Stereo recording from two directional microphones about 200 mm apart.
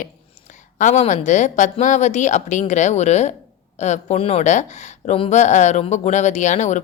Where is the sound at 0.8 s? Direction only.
35° left (ahead or behind).